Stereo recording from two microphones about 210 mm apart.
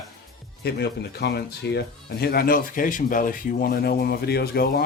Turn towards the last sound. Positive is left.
turn(degrees=50)  # may be behind; listen again after turning